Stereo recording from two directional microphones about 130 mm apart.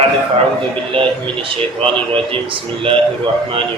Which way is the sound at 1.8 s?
45° right (ahead or behind).